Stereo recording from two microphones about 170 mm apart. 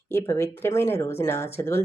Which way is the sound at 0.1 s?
15° left (ahead or behind).